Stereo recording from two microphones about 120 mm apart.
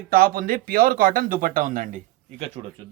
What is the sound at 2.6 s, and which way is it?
Speech, 55° right (ahead or behind).